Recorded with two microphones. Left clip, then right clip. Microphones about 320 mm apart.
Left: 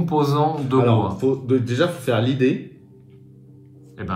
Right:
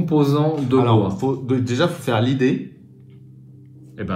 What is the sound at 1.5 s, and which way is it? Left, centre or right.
Speech, right.